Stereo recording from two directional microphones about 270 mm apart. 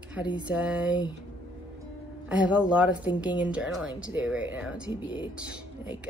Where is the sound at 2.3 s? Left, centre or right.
Centre.